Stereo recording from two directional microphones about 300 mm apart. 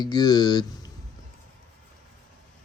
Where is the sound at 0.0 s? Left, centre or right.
Centre.